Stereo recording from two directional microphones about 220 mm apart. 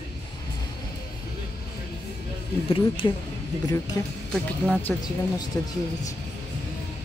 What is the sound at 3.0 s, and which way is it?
A man's voice, 15° left (ahead or behind).